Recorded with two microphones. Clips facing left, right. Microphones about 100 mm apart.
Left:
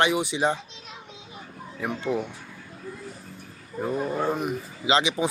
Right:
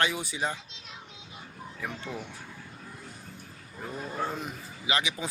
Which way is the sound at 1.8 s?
55° left (ahead or behind).